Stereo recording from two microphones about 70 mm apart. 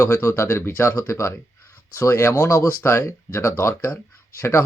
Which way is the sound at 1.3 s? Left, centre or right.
Left.